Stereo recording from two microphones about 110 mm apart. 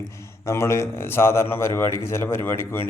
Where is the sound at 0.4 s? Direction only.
25° left (ahead or behind).